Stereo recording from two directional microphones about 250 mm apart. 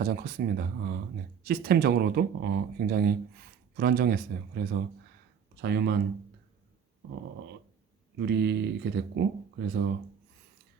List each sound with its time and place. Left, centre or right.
0.0 s speech: right
8.2 s speech: right